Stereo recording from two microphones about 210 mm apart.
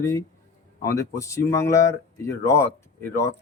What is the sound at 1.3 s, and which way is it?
Speech, 15° left (ahead or behind).